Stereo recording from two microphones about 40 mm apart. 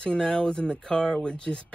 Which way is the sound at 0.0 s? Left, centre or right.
Left.